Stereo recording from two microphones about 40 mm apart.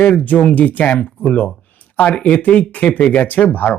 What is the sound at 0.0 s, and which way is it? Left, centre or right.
Speech, left.